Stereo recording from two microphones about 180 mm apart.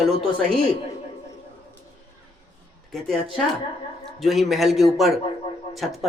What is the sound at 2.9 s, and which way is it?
Speech, centre (ahead or behind).